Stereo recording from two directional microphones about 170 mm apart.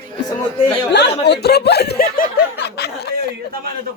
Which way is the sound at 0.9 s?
85° left.